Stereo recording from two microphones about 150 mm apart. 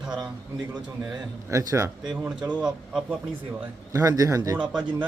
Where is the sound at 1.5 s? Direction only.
20° right (ahead or behind).